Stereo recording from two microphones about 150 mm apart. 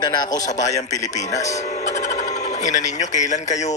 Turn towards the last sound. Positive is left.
turn(degrees=50)  # may be behind; listen again after turning